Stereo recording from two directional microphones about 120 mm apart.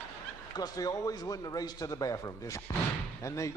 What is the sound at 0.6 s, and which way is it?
A man's voice, 30° left (ahead or behind).